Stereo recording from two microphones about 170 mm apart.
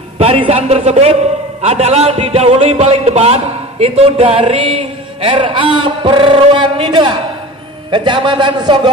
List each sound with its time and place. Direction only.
0.2 s a man's voice: 35° right (ahead or behind)